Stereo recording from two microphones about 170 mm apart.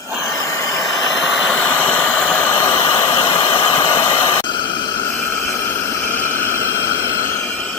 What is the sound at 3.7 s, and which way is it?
Vehicle, 15° left (ahead or behind).